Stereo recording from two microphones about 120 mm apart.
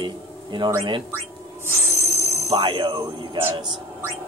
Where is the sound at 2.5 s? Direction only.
45° right (ahead or behind).